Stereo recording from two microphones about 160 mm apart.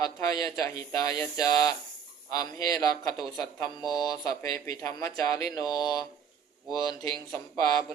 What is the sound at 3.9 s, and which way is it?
Mantra, 25° left (ahead or behind).